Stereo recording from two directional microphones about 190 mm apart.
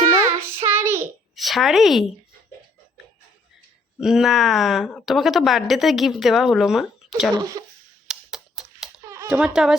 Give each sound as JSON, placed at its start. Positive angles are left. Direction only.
{"t": 0.6, "sound": "child singing", "side_deg": -15}
{"t": 1.4, "sound": "speech", "side_deg": 0}
{"t": 4.0, "sound": "a woman's voice", "side_deg": 0}
{"t": 7.3, "sound": "speech", "side_deg": -20}
{"t": 8.0, "sound": "a sound", "side_deg": 0}
{"t": 9.0, "sound": "a sound", "side_deg": -15}
{"t": 9.4, "sound": "a woman's voice", "side_deg": -5}